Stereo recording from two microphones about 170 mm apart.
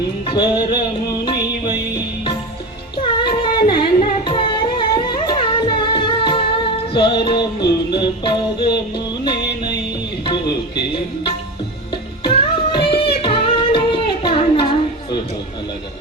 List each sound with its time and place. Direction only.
0.3 s music: 25° left (ahead or behind)
3.2 s singing: 30° left (ahead or behind)
4.3 s music: 30° left (ahead or behind)
10.2 s music: 25° left (ahead or behind)